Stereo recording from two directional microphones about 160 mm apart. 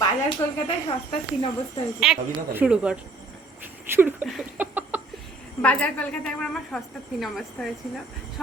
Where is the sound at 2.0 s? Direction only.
Centre (ahead or behind).